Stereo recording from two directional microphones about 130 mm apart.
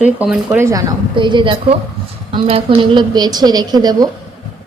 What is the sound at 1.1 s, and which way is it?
A woman's voice, 40° right (ahead or behind).